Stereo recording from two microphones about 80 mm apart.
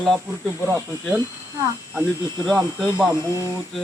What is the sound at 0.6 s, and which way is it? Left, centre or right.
Speech, right.